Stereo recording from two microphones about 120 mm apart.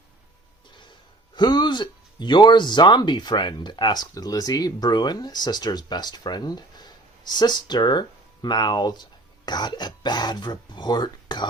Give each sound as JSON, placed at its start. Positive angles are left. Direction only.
{"t": 1.4, "sound": "speech", "side_deg": 40}